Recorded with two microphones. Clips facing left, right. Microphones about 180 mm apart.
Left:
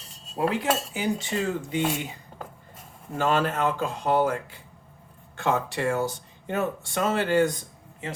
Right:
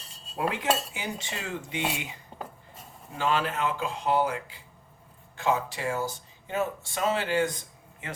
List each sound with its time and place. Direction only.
0.3 s cutlery: 35° left (ahead or behind)
3.2 s speech: 50° left (ahead or behind)